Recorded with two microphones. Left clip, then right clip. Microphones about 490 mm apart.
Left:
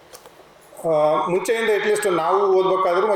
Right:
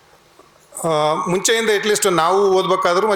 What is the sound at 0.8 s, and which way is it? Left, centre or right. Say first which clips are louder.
A man's voice: even; right.